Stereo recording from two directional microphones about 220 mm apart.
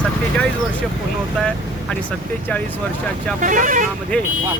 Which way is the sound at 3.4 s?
35° right (ahead or behind).